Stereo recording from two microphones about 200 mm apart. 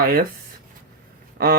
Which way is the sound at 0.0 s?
45° right (ahead or behind).